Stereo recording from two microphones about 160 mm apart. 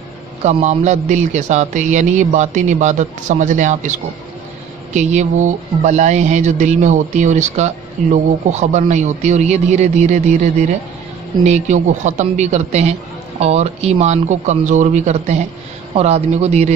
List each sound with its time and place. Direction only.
0.4 s speech: 45° right (ahead or behind)
4.9 s speech: 45° right (ahead or behind)